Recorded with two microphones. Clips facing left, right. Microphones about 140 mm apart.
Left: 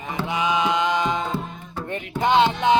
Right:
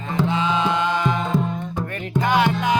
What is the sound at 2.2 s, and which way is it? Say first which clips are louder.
Music: left 2 dB; 25° left (ahead or behind).